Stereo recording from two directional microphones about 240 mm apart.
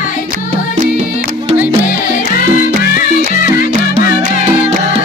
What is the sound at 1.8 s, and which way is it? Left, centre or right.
Music, left.